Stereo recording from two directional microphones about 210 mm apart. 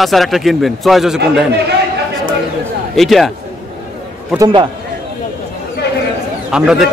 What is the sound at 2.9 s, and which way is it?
Speech, centre (ahead or behind).